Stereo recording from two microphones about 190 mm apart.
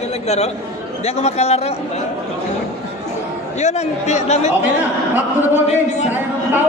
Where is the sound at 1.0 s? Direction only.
35° left (ahead or behind).